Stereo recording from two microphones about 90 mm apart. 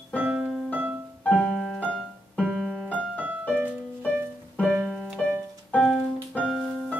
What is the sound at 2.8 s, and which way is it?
Piano, 15° left (ahead or behind).